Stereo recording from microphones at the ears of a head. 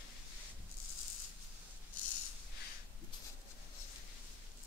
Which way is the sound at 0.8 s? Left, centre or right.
Left.